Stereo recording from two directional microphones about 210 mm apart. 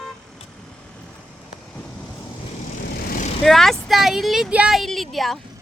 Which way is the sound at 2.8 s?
40° left (ahead or behind).